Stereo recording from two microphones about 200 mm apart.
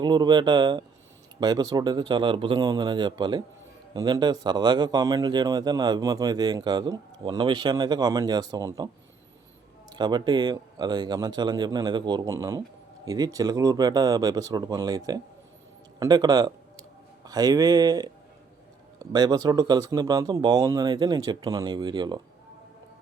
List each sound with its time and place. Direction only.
0.0 s a man's voice: 20° right (ahead or behind)
9.9 s a man's voice: 20° right (ahead or behind)
19.1 s a man's voice: 20° right (ahead or behind)